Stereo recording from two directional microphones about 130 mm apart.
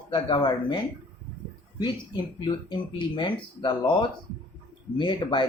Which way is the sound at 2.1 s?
35° left (ahead or behind).